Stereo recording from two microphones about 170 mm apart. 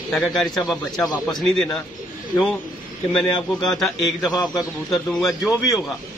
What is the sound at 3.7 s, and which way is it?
Speech, centre (ahead or behind).